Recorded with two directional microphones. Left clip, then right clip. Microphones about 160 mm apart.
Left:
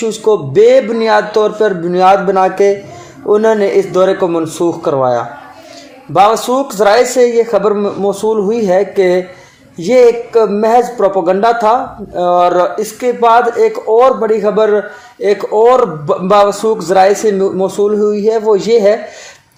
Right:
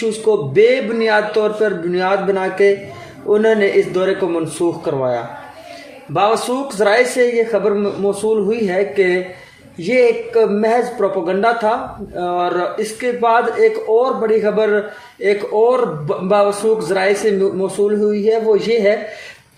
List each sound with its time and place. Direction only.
0.1 s a man's voice: 30° left (ahead or behind)